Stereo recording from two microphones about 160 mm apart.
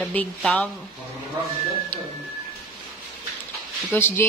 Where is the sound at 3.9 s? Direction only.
15° left (ahead or behind).